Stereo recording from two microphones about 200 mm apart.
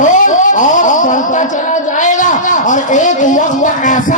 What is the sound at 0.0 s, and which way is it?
A man's voice, 40° left (ahead or behind).